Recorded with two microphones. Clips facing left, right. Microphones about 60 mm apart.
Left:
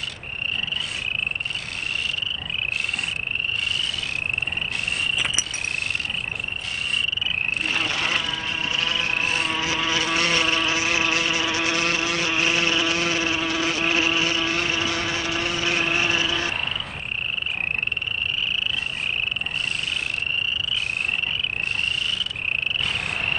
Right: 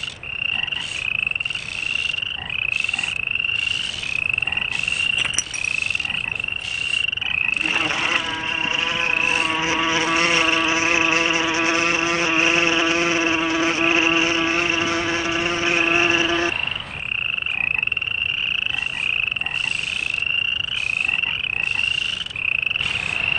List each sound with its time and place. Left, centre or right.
5.2 s cricket: centre
7.6 s a sound: right
9.7 s mosquito: right